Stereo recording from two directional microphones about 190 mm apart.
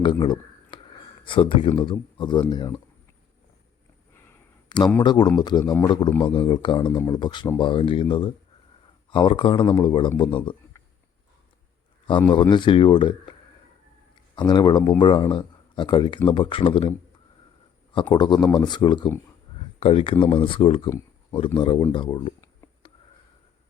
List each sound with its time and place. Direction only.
0.0 s a sound: 25° left (ahead or behind)
1.2 s speech: 25° left (ahead or behind)
4.7 s a sound: 25° left (ahead or behind)
5.0 s speech: 20° left (ahead or behind)
9.0 s speech: 25° left (ahead or behind)
12.3 s speech: 25° left (ahead or behind)
14.3 s speech: 25° left (ahead or behind)
18.1 s speech: 20° left (ahead or behind)